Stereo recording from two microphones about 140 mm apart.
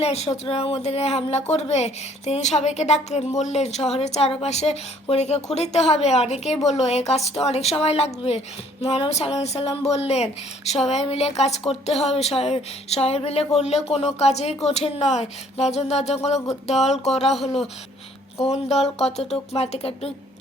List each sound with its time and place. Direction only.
0.0 s speech: 50° left (ahead or behind)